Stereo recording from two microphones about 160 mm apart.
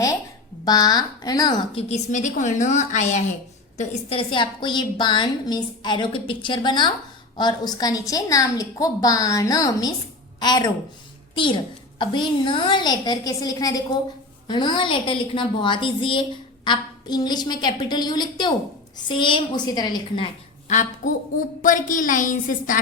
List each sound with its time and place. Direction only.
0.6 s a woman's voice: 25° left (ahead or behind)
1.7 s a woman's voice: 45° left (ahead or behind)
3.8 s a woman's voice: 35° left (ahead or behind)
20.7 s a woman's voice: 50° left (ahead or behind)